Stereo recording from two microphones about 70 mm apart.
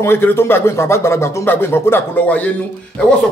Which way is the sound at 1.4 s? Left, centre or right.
Left.